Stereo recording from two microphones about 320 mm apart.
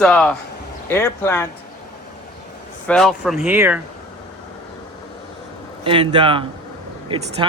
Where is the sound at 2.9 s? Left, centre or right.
Centre.